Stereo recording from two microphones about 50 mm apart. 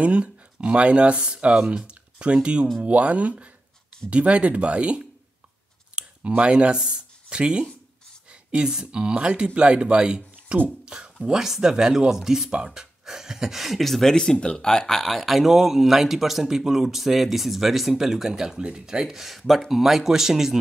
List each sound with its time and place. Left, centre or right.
0.0 s speech: right; by 14.1 s centre
14.1 s speech: centre